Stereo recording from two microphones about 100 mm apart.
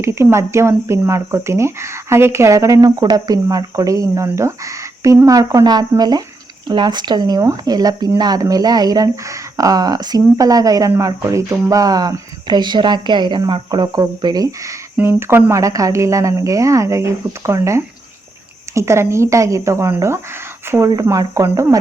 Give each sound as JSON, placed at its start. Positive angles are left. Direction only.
{"t": 0.0, "sound": "speech", "side_deg": -25}
{"t": 14.9, "sound": "speech", "side_deg": -20}